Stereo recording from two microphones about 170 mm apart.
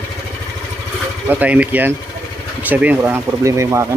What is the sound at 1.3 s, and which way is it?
Speech, 10° right (ahead or behind).